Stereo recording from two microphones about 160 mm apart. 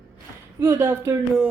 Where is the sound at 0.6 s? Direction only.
15° right (ahead or behind).